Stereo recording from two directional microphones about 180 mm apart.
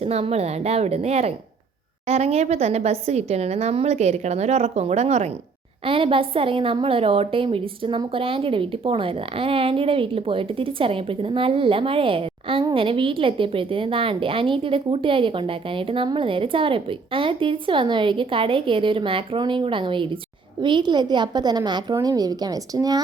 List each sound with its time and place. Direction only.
0.0 s a woman's voice: 35° right (ahead or behind); by 23.0 s 20° right (ahead or behind)